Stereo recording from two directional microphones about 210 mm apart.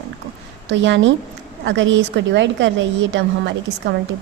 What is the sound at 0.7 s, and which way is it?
A woman's voice, 60° right (ahead or behind).